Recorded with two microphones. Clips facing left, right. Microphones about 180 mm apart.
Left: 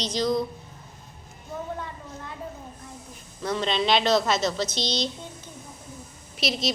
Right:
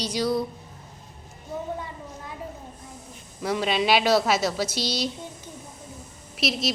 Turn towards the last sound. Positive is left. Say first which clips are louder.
# right 1 dB
turn(degrees=0)  # may be behind; listen again after turning